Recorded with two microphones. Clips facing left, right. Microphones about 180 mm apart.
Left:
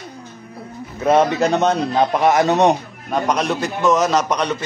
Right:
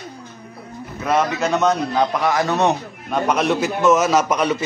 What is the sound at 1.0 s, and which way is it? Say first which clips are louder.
A man's voice: left 4 dB; 30° left (ahead or behind).